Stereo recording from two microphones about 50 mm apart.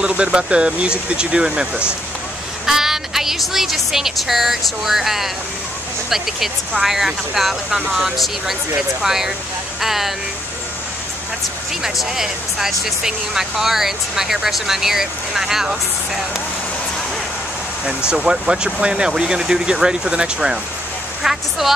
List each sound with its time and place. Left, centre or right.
0.2 s speech: right
2.6 s a woman's voice: centre
11.8 s speech: centre
17.8 s speech: centre
21.2 s a woman's voice: centre